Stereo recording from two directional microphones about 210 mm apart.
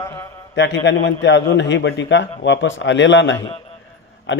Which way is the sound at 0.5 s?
55° left (ahead or behind).